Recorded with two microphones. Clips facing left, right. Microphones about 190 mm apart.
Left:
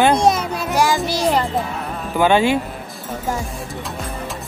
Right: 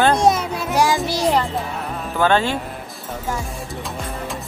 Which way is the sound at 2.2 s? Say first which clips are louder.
Left 3 dB; 15° left (ahead or behind).